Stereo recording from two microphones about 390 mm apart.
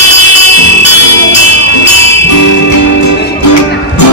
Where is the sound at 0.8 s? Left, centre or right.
Right.